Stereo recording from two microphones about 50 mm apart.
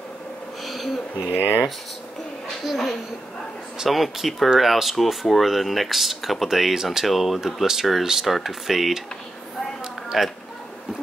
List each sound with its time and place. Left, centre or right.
0.7 s bee: centre
1.3 s speech: left
2.6 s speech: centre
10.0 s a sound: centre